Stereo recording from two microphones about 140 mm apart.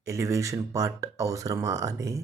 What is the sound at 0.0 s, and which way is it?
Speech, 25° right (ahead or behind).